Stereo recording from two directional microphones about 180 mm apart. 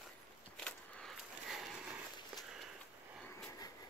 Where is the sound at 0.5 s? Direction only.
5° left (ahead or behind).